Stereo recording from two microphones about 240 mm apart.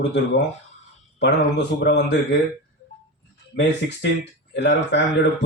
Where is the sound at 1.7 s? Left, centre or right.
Left.